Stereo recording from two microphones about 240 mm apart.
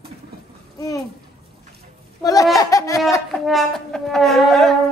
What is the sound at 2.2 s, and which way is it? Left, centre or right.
Speech, centre.